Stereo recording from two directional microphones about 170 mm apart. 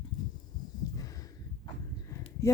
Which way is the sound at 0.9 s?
20° left (ahead or behind).